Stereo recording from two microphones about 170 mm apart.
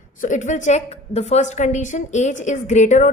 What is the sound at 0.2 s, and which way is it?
A woman's voice, 50° left (ahead or behind).